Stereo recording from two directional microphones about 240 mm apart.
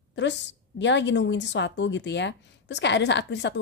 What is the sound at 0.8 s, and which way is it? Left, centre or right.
Speech, left.